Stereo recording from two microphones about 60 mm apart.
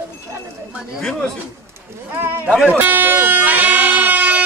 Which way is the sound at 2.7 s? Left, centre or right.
Right.